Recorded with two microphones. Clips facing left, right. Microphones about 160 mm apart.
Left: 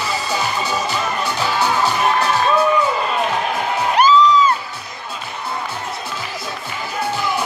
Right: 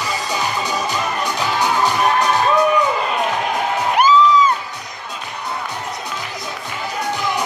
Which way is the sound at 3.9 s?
10° right (ahead or behind).